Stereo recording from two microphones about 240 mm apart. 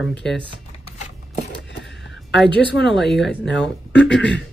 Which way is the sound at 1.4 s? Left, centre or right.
Left.